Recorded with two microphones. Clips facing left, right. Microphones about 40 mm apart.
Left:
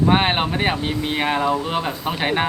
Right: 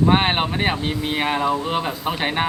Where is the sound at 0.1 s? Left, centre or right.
Centre.